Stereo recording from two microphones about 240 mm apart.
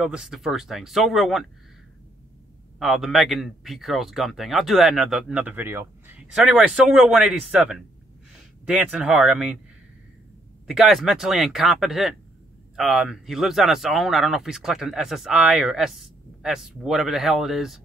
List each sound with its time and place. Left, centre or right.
0.0 s speech: centre
2.8 s speech: centre
10.7 s speech: centre